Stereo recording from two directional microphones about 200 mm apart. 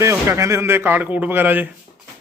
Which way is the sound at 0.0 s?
15° right (ahead or behind).